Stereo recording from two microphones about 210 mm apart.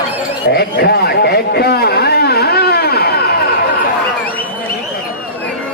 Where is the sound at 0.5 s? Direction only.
50° left (ahead or behind).